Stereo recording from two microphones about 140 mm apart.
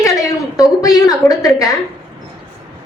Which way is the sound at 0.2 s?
25° left (ahead or behind).